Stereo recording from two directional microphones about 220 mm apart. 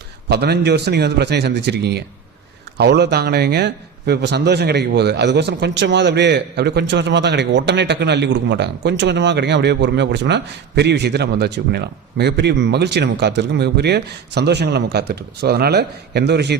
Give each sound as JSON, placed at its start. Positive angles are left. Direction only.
{"t": 0.3, "sound": "a man's voice", "side_deg": -45}